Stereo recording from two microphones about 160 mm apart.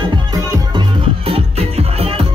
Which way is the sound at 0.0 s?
25° right (ahead or behind).